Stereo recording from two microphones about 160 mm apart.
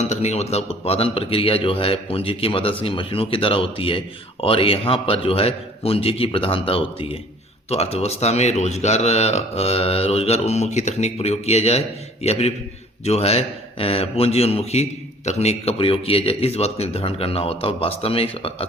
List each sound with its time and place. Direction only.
0.0 s a man's voice: 45° left (ahead or behind)